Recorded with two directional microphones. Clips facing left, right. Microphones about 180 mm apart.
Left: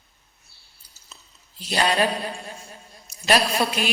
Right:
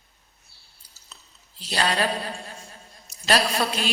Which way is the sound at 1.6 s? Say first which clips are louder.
Left 3 dB; 15° left (ahead or behind).